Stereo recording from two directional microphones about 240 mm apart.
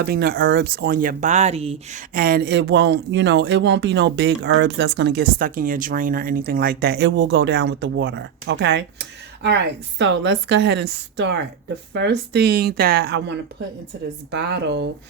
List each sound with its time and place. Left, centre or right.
0.0 s speech: right